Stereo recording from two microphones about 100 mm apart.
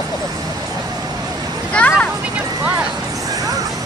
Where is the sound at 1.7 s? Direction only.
10° left (ahead or behind).